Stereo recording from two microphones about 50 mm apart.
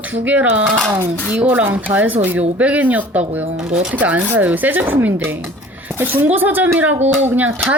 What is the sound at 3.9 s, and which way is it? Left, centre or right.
Speech, right.